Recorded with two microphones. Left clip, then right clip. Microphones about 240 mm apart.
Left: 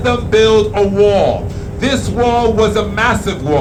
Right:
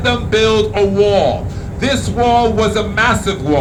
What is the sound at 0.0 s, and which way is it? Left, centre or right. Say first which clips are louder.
A man's voice: left 2 dB; right.